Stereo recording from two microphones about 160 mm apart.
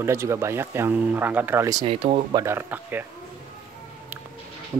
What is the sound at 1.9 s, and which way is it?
Speech, 40° right (ahead or behind).